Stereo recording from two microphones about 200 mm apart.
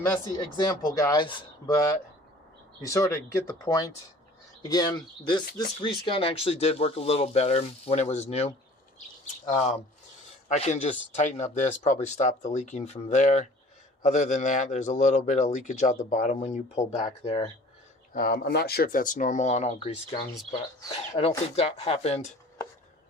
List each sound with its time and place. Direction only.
0.3 s a man's voice: 20° left (ahead or behind)
18.1 s a man's voice: 45° left (ahead or behind)